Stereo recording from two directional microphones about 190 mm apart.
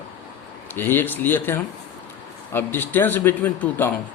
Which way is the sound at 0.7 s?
10° left (ahead or behind).